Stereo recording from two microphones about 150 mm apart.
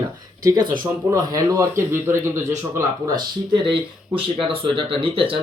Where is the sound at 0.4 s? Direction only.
30° right (ahead or behind).